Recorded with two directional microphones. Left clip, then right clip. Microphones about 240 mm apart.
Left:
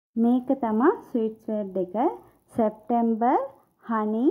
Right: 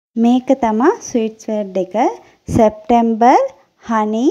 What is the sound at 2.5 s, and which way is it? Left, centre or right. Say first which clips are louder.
Speech: right 12 dB; right.